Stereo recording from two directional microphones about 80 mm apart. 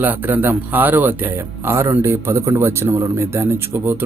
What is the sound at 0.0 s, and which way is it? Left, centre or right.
Speech, right.